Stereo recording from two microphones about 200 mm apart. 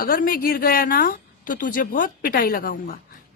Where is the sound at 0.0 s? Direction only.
45° left (ahead or behind).